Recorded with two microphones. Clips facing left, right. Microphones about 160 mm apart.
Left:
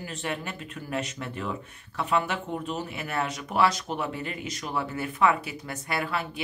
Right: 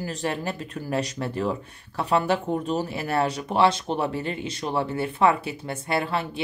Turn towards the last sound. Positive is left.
turn(degrees=-30)  # may be behind; listen again after turning